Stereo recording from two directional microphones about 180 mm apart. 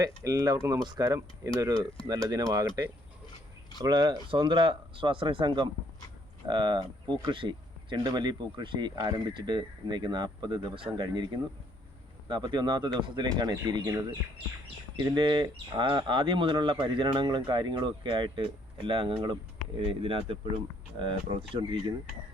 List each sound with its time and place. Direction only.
0.0 s speech: 20° right (ahead or behind)